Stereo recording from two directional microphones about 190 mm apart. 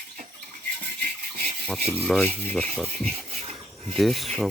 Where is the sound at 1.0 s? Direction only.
40° right (ahead or behind).